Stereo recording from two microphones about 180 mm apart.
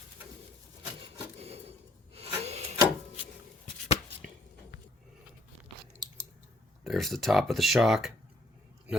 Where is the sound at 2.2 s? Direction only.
35° right (ahead or behind).